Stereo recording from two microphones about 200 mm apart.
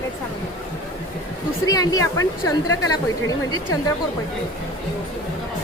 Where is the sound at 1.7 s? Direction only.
15° left (ahead or behind).